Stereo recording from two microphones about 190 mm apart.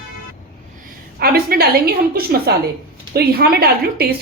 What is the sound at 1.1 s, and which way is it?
A woman's voice, 55° right (ahead or behind).